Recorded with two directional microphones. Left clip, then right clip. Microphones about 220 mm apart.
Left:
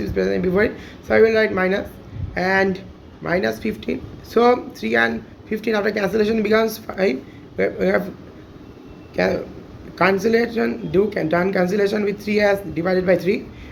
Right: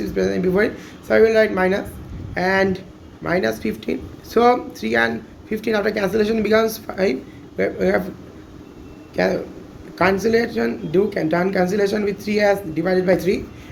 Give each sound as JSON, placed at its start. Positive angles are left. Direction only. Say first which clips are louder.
{"t": 0.0, "sound": "speech", "louder": "even", "side_deg": 0}
{"t": 9.1, "sound": "speech", "louder": "even", "side_deg": 0}